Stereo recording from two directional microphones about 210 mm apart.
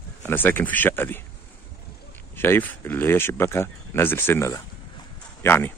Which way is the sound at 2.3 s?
10° left (ahead or behind).